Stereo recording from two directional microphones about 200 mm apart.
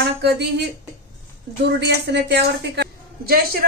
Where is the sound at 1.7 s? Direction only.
55° right (ahead or behind).